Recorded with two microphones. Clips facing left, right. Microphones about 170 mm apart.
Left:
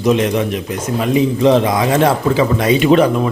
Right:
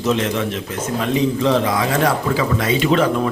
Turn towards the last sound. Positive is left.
turn(degrees=15)  # may be behind; listen again after turning